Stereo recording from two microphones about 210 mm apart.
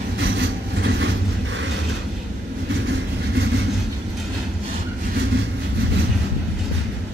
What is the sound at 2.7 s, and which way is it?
Train, 60° right (ahead or behind).